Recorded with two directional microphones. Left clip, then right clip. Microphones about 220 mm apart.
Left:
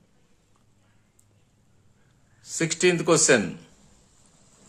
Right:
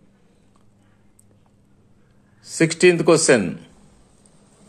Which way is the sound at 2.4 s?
20° right (ahead or behind).